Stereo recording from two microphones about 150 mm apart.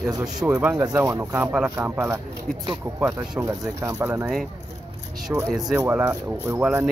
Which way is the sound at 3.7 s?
20° right (ahead or behind).